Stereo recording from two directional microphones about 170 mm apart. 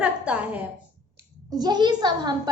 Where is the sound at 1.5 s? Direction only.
25° right (ahead or behind).